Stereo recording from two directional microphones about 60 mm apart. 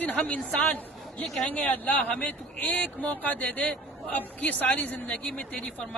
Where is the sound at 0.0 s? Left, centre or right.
Left.